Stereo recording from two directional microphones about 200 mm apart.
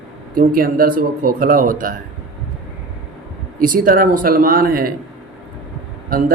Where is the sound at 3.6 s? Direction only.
45° right (ahead or behind).